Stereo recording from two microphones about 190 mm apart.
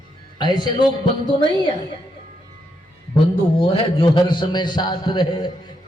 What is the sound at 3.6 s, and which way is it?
A man's voice, 30° left (ahead or behind).